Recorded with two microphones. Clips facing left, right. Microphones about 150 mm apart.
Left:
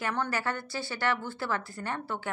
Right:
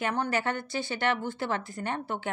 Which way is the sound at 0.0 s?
15° right (ahead or behind).